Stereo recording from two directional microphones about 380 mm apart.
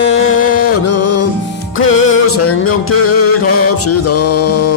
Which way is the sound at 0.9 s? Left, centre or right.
Left.